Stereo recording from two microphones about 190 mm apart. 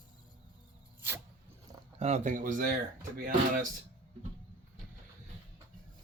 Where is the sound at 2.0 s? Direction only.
35° right (ahead or behind).